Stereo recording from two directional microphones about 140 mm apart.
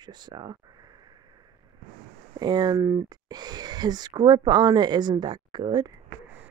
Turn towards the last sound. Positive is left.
turn(degrees=-30)  # may be behind; listen again after turning